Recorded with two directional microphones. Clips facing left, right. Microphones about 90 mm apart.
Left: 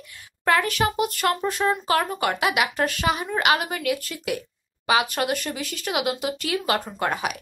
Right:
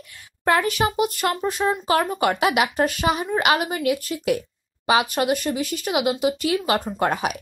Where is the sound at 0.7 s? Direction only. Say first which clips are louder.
Right 2 dB; 15° right (ahead or behind).